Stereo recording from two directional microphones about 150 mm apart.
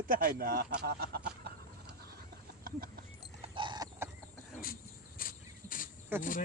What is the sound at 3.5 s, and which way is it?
Horse, 30° right (ahead or behind).